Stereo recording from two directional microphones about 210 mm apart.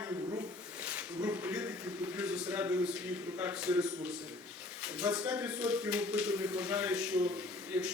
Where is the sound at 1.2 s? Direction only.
10° right (ahead or behind).